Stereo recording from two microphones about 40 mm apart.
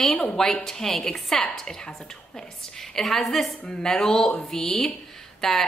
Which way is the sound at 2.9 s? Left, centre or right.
Centre.